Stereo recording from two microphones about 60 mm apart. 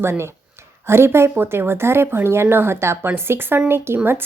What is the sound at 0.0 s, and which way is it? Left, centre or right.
A woman's voice, right.